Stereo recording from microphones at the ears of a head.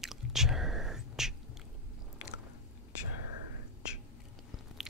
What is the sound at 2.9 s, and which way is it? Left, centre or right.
Whispering, left.